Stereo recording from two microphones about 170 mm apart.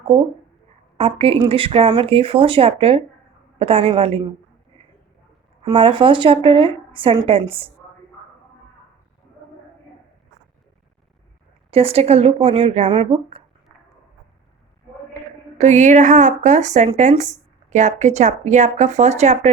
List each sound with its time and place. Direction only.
0.9 s a woman's voice: 35° right (ahead or behind)
5.6 s a woman's voice: 30° right (ahead or behind)
11.7 s a woman's voice: 35° right (ahead or behind)
15.5 s speech: 45° right (ahead or behind)